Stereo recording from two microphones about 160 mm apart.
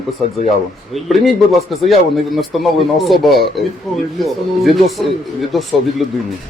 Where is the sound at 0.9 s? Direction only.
Centre (ahead or behind).